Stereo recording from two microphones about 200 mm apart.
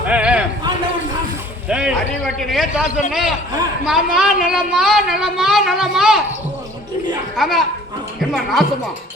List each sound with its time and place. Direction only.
0.0 s a sound: 5° right (ahead or behind)
1.6 s a woman's voice: 5° right (ahead or behind)
7.3 s a woman's voice: centre (ahead or behind)